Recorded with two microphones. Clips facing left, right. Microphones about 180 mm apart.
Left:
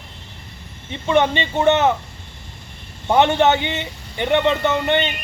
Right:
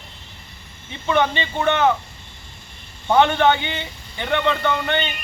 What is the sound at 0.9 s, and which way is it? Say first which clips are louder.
Speech: left 3 dB; 25° left (ahead or behind).